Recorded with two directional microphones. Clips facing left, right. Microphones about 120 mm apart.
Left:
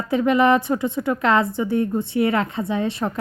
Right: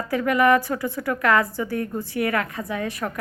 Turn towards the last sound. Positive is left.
turn(degrees=25)  # may be behind; listen again after turning